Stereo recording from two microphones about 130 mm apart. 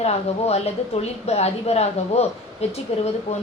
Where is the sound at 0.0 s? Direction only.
55° left (ahead or behind).